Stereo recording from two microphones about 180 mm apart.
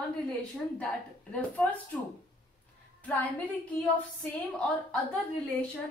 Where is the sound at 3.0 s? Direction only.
10° left (ahead or behind).